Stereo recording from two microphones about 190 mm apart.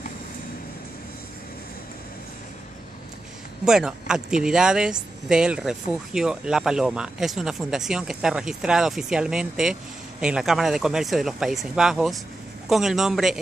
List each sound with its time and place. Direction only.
3.6 s speech: 5° right (ahead or behind)